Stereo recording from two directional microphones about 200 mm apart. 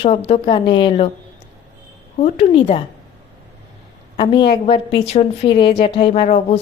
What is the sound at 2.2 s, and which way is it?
Speech, 30° left (ahead or behind).